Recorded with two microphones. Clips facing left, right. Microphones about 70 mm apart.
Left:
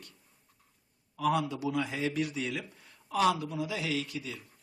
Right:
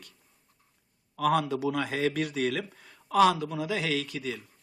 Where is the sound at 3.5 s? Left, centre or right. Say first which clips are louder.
Right 3 dB; right.